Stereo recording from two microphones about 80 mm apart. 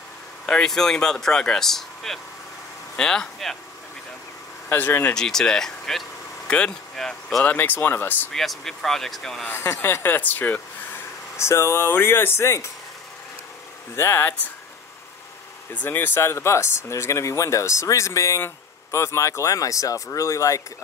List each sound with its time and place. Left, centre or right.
0.5 s speech: centre
4.6 s speech: left
5.1 s speech: centre
7.4 s speech: left
8.3 s speech: centre
9.5 s speech: left
11.3 s speech: left
13.9 s speech: left
15.7 s speech: left